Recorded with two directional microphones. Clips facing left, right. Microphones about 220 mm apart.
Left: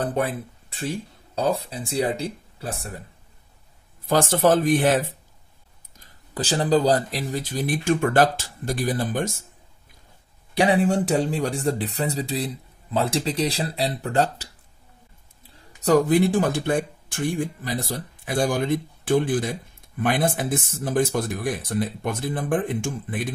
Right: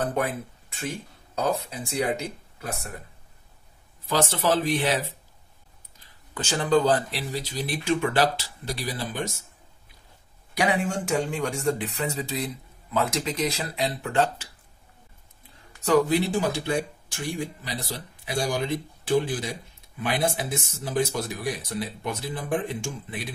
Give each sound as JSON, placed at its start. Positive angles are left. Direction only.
{"t": 0.0, "sound": "speech", "side_deg": 35}
{"t": 4.0, "sound": "speech", "side_deg": 50}
{"t": 5.9, "sound": "speech", "side_deg": 35}
{"t": 10.5, "sound": "speech", "side_deg": 30}
{"t": 15.8, "sound": "speech", "side_deg": 45}